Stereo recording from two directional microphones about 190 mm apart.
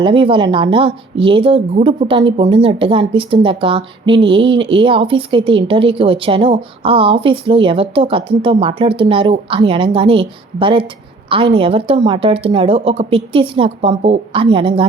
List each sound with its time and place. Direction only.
0.0 s a woman's voice: 25° right (ahead or behind)